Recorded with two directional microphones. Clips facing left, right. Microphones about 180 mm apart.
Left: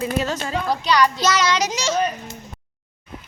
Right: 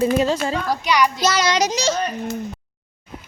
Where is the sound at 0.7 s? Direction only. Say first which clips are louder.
Left 2 dB; 10° right (ahead or behind).